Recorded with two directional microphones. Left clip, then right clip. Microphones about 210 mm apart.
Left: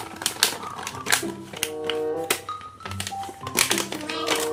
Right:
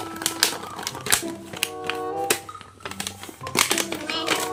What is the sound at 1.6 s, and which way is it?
Music, 5° right (ahead or behind).